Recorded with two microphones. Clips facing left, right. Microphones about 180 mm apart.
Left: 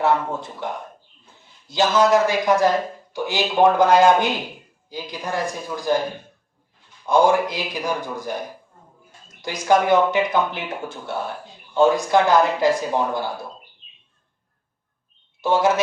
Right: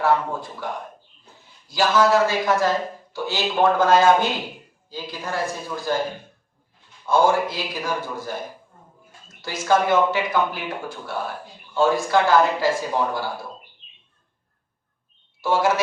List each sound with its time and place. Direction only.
0.6 s a man's voice: 25° left (ahead or behind)
7.0 s a man's voice: 15° left (ahead or behind)
9.4 s speech: 15° left (ahead or behind)
15.4 s speech: 20° left (ahead or behind)